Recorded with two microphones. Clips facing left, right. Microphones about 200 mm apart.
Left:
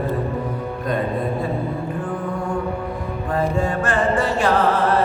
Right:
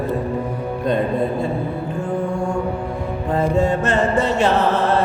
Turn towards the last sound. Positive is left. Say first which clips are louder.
# even
turn(degrees=-25)  # may be behind; listen again after turning